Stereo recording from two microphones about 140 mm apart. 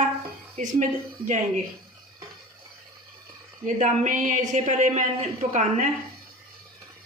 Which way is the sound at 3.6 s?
65° right (ahead or behind).